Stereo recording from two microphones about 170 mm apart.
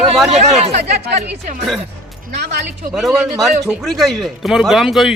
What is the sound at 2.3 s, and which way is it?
Speech, 80° right.